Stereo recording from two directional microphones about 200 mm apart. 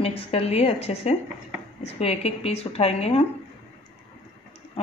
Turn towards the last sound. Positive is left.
turn(degrees=30)  # may be behind; listen again after turning